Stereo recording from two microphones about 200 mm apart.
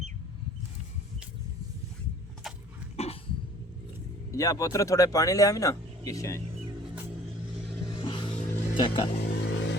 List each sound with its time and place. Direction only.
2.9 s cough: 30° left (ahead or behind)
4.3 s speech: 15° left (ahead or behind)
8.0 s vehicle: 25° left (ahead or behind)
9.4 s vehicle: 60° left (ahead or behind)